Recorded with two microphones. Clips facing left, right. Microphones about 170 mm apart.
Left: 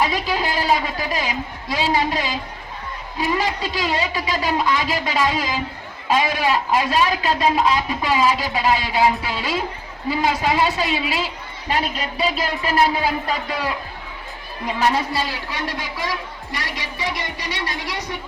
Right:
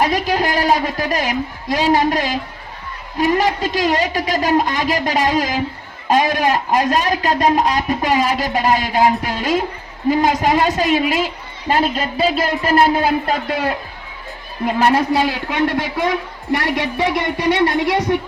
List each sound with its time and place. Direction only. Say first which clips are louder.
0.0 s a man's voice: right 4 dB; 45° right (ahead or behind)